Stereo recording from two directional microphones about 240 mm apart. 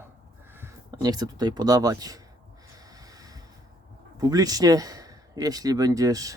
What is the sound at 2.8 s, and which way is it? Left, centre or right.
Snort, centre.